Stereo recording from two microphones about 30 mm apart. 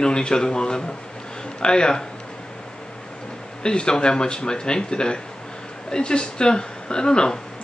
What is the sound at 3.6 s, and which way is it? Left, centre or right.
A man's voice, left.